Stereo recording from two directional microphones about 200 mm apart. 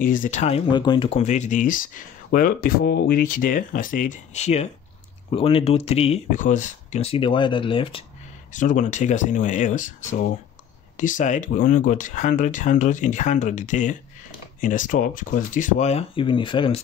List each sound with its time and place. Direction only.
0.0 s speech: 40° left (ahead or behind); by 8.0 s 25° left (ahead or behind)
8.5 s speech: 40° left (ahead or behind)
11.0 s speech: 40° left (ahead or behind); by 16.8 s 25° left (ahead or behind)